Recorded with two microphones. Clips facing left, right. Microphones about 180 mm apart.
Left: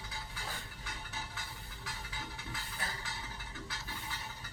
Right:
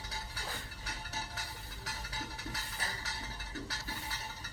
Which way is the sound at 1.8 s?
40° right (ahead or behind).